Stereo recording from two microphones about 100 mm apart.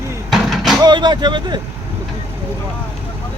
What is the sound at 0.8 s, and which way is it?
Speech, 45° right (ahead or behind).